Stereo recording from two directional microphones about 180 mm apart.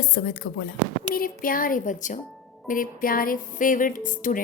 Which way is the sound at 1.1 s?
50° left (ahead or behind).